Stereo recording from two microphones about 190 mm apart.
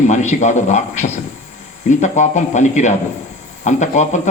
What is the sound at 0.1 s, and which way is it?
Speech, 40° left (ahead or behind).